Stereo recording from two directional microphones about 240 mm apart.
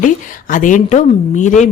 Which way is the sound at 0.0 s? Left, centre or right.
Left.